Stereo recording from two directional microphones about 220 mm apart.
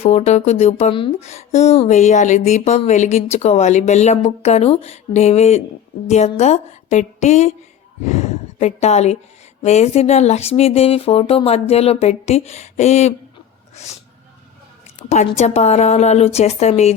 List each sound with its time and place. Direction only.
0.0 s a woman's voice: 30° left (ahead or behind)
15.1 s speech: 30° left (ahead or behind)